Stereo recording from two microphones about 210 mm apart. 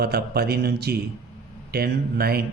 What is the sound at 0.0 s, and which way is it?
Speech, 50° right (ahead or behind).